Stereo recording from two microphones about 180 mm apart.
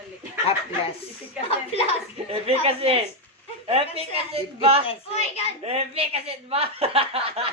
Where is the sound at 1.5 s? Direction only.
35° left (ahead or behind).